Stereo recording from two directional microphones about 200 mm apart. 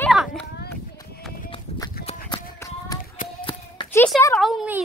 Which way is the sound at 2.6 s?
15° left (ahead or behind).